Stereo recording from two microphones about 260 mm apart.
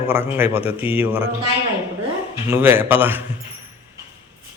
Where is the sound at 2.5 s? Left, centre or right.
Centre.